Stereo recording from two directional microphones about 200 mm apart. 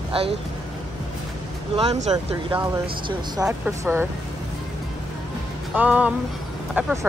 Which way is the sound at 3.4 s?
10° right (ahead or behind).